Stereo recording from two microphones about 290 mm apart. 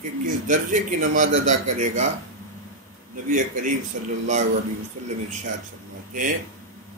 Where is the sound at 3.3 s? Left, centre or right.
Right.